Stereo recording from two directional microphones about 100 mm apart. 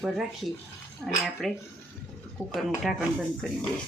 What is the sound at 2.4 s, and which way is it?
Speech, 20° left (ahead or behind).